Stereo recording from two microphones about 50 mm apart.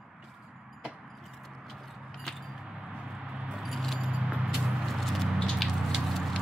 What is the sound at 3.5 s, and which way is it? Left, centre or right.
Keys jangling, centre.